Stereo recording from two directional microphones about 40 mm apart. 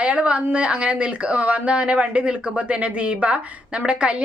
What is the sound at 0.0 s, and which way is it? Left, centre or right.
A woman's voice, right.